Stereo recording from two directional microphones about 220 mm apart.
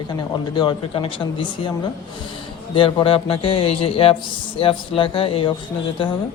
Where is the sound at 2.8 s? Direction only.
25° left (ahead or behind).